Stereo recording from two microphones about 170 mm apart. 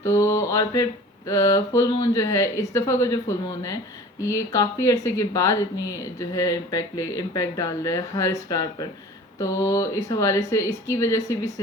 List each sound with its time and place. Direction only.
0.0 s mantra: 15° left (ahead or behind)
1.3 s speech: 20° left (ahead or behind)